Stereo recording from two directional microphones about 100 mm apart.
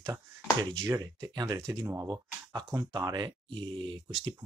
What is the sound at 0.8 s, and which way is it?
Speech, 25° right (ahead or behind).